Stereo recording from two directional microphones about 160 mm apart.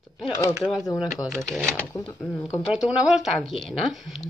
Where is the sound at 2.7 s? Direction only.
5° right (ahead or behind).